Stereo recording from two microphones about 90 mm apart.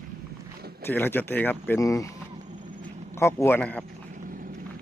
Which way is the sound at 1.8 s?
35° left (ahead or behind).